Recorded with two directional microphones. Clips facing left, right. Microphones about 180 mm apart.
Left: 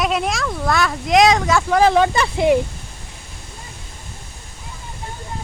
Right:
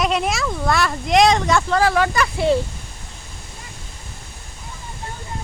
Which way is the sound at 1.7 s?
20° left (ahead or behind).